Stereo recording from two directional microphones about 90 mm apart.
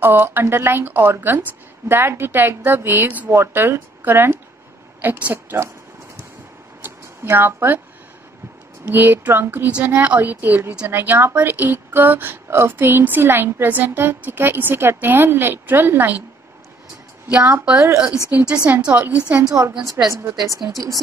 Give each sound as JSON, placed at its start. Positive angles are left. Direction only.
{"t": 0.0, "sound": "speech", "side_deg": -20}
{"t": 6.8, "sound": "a sound", "side_deg": -25}
{"t": 8.8, "sound": "speech", "side_deg": -20}
{"t": 17.3, "sound": "a woman's voice", "side_deg": -20}
{"t": 20.1, "sound": "speech", "side_deg": -35}